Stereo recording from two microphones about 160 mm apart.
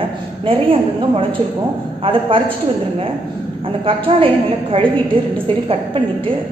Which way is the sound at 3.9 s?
35° right (ahead or behind).